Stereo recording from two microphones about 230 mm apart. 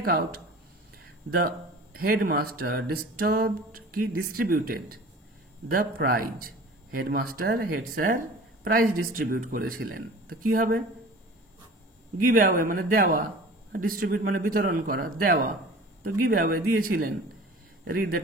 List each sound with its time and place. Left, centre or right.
0.0 s a man's voice: right
2.0 s a man's voice: right
12.3 s a man's voice: right